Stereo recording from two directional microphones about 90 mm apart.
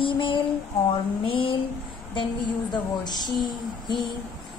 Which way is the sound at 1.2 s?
80° left.